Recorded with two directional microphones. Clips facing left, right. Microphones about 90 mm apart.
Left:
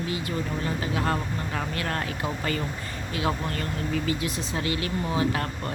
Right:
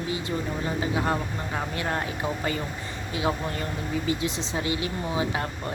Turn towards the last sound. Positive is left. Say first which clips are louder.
# left 1 dB
turn(degrees=-20)  # may be behind; listen again after turning